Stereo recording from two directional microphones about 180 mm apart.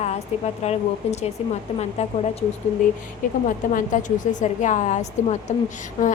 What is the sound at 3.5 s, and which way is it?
A woman's voice, 45° left (ahead or behind).